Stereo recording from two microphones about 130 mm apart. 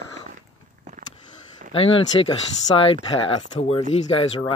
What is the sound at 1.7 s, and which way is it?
Speech, 45° left (ahead or behind).